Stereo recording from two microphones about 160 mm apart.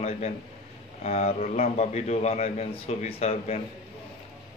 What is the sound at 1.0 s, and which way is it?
A man's voice, 45° left (ahead or behind).